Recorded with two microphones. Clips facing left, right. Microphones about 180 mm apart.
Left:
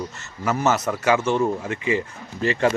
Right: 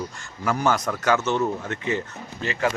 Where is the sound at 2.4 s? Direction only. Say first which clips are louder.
Left 5 dB; 35° left (ahead or behind).